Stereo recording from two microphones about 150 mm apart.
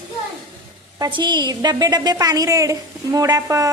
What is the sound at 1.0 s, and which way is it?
A woman's voice, 30° right (ahead or behind).